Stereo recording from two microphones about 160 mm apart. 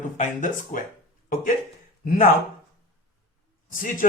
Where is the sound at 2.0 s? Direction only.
60° left (ahead or behind).